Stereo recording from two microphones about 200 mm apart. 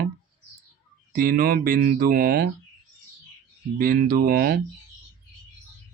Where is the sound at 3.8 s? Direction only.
45° right (ahead or behind).